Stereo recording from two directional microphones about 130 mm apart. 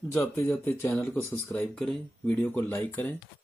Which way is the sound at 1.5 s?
5° left (ahead or behind).